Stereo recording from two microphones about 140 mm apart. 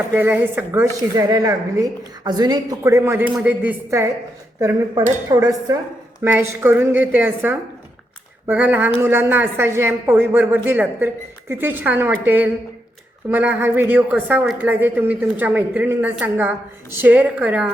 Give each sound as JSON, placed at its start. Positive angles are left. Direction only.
{"t": 0.1, "sound": "a woman's voice", "side_deg": -15}